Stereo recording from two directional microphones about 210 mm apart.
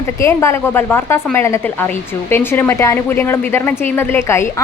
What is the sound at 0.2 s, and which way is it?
Speech, 15° left (ahead or behind).